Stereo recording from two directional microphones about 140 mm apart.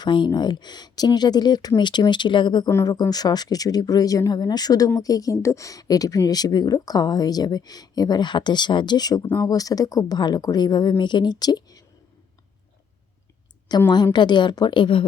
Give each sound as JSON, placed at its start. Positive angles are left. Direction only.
{"t": 0.0, "sound": "speech", "side_deg": 35}
{"t": 13.9, "sound": "speech", "side_deg": 30}